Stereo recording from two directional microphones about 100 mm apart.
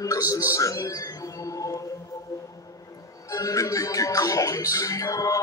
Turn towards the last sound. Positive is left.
turn(degrees=35)  # may be behind; listen again after turning